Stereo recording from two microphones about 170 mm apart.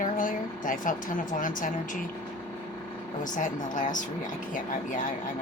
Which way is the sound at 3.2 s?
50° left (ahead or behind).